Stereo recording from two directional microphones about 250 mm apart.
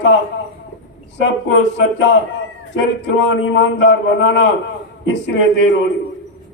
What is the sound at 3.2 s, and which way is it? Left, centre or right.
A man's voice, left.